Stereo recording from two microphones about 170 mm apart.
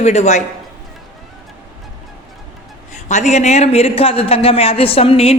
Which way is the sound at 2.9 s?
45° left (ahead or behind).